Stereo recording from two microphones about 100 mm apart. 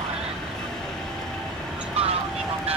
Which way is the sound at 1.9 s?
90° right.